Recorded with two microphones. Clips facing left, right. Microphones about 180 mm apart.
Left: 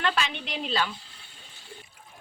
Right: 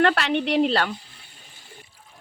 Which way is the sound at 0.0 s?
65° right (ahead or behind).